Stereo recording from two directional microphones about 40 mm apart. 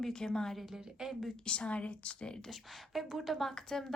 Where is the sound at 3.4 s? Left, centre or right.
Centre.